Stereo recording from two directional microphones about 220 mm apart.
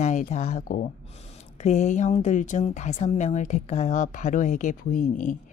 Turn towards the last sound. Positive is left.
turn(degrees=35)  # may be behind; listen again after turning